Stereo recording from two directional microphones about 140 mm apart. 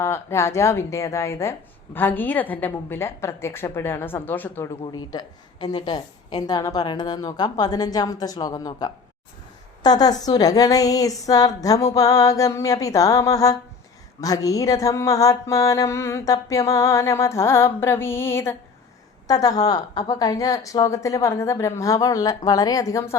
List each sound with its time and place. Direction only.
0.0 s speech: 20° left (ahead or behind)
4.9 s mantra: 30° left (ahead or behind)